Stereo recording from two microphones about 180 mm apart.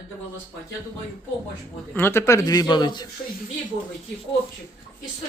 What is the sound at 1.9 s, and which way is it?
A man's voice, 15° left (ahead or behind).